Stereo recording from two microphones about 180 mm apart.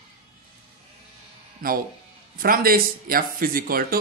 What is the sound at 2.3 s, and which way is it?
Speech, 55° right (ahead or behind).